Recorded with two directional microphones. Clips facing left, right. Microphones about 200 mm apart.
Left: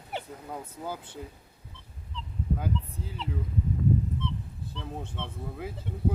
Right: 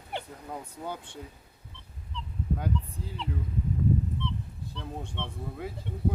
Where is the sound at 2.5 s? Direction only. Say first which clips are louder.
Even; centre (ahead or behind).